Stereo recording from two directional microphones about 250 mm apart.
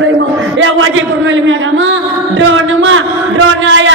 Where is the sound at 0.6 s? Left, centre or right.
Right.